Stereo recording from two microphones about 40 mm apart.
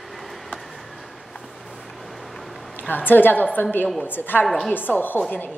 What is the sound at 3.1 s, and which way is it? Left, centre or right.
A woman's voice, left.